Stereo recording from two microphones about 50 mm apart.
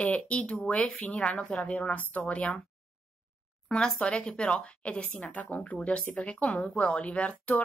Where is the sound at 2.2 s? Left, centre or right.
Centre.